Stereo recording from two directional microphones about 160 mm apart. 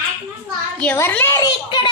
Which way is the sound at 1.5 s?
30° left (ahead or behind).